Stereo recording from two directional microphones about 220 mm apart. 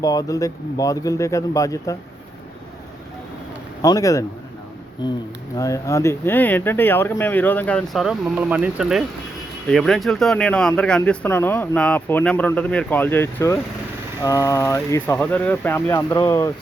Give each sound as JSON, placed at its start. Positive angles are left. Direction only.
{"t": 0.0, "sound": "speech", "side_deg": 15}
{"t": 3.8, "sound": "speech", "side_deg": 15}